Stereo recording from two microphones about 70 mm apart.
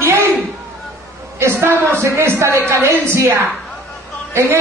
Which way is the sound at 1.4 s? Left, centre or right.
Right.